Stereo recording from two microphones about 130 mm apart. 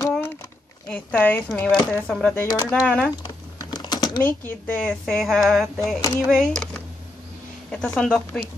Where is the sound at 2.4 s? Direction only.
30° left (ahead or behind).